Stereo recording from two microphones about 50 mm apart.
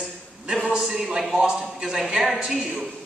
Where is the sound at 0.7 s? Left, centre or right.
Centre.